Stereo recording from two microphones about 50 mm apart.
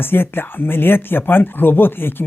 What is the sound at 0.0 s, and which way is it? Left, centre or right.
Speech, left.